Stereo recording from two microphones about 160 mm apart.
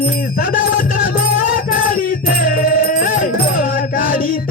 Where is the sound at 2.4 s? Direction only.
55° left (ahead or behind).